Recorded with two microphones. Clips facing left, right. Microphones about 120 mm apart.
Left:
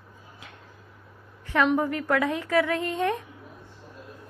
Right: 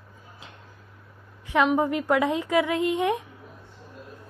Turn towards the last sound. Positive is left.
turn(degrees=-15)  # may be behind; listen again after turning